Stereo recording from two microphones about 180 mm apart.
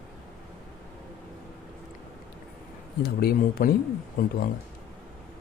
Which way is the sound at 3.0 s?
60° left (ahead or behind).